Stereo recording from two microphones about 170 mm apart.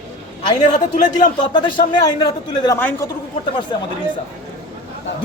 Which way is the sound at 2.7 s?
15° left (ahead or behind).